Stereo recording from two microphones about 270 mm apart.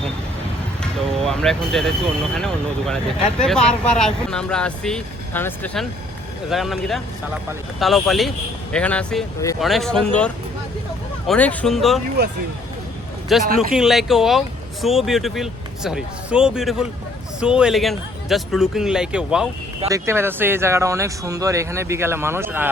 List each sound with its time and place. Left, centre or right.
0.8 s speech: centre
12.2 s speech: right
13.3 s speech: centre